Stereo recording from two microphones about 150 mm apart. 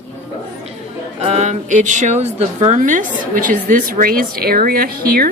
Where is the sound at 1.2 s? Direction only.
50° right (ahead or behind); by 5.2 s 80° right.